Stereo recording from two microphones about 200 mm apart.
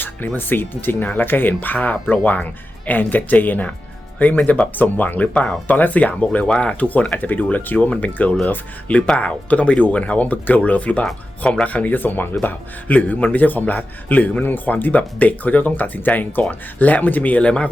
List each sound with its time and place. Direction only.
0.0 s speech: 10° left (ahead or behind)